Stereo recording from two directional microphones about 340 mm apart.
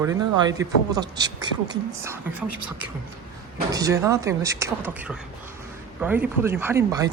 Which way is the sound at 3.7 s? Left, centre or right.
Centre.